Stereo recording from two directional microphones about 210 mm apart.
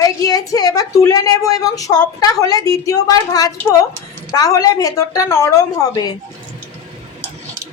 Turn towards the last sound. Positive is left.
turn(degrees=15)  # may be behind; listen again after turning